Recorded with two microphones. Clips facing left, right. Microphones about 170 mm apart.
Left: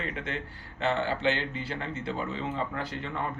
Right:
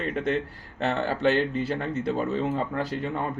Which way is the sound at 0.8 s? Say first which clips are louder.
Right 3 dB; 40° right (ahead or behind).